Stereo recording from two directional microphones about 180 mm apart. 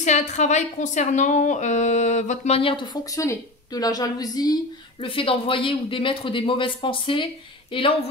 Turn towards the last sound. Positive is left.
turn(degrees=30)  # may be behind; listen again after turning